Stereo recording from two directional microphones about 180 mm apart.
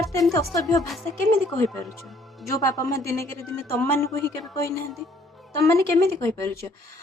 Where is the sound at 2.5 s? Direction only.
15° left (ahead or behind).